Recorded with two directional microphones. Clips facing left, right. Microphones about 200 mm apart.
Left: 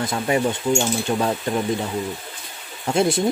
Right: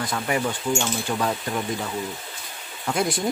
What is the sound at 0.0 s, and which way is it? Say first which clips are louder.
Speech: left 4 dB; 25° left (ahead or behind).